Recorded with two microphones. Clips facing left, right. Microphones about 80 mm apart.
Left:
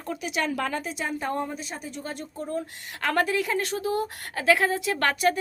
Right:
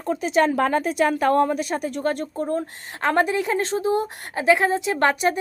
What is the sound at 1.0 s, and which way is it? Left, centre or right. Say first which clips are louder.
A woman's voice: right 12 dB; right.